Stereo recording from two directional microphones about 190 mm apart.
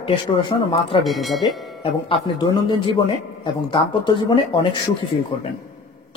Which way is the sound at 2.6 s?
25° left (ahead or behind).